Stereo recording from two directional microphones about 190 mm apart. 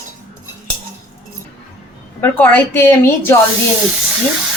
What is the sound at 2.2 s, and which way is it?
A woman's voice, 10° left (ahead or behind).